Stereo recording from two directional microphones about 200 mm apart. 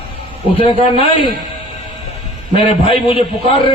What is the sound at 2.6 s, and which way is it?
Speech, 25° left (ahead or behind).